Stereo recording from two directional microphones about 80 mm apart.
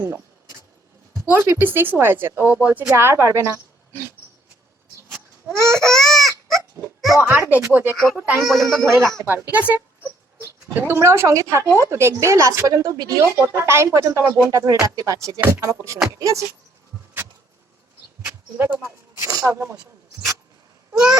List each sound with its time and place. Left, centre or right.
1.5 s speech: right
2.9 s a woman's voice: right
5.5 s speech: right
5.8 s a sound: centre
7.2 s speech: right
8.4 s speech: centre
8.6 s speech: right
9.2 s speech: right
10.4 s speech: right
13.2 s speech: right
14.1 s speech: right
18.5 s speech: right
19.2 s speech: right
20.9 s wail: centre